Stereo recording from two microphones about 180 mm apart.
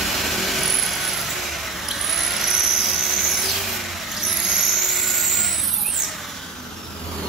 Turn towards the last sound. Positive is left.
turn(degrees=0)  # may be behind; listen again after turning